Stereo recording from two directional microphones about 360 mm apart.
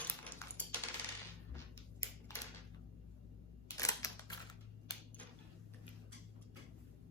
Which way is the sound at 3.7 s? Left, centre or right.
Centre.